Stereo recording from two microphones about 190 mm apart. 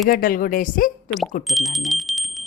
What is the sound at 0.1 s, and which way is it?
Speech, 50° left (ahead or behind).